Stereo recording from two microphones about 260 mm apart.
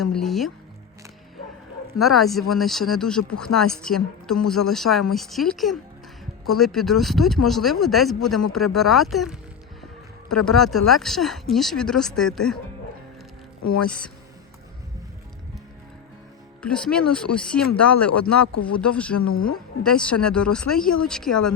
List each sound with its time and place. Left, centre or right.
0.0 s speech: centre
2.0 s speech: centre
13.6 s speech: left
16.6 s speech: centre
18.3 s speech: left
18.8 s speech: centre
19.3 s speech: left
19.8 s speech: centre